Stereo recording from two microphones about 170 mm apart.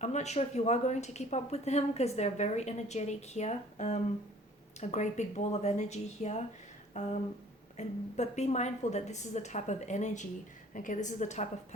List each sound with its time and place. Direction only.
0.0 s a woman's voice: 40° left (ahead or behind)